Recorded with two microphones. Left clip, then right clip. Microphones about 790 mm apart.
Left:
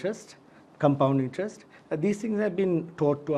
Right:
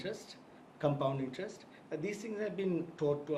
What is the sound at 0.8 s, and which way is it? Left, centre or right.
Speech, left.